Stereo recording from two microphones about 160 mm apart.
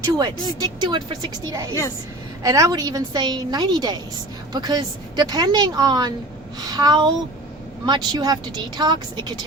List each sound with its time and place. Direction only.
0.2 s a woman's voice: 25° right (ahead or behind)